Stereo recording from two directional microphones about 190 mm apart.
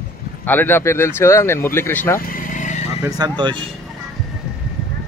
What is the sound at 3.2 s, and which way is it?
Speech, 25° right (ahead or behind).